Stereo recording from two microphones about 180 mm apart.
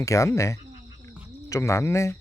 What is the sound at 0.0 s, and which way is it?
Speech, 15° left (ahead or behind).